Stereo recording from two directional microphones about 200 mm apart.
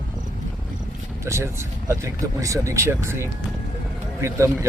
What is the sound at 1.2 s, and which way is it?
Speech, 15° right (ahead or behind).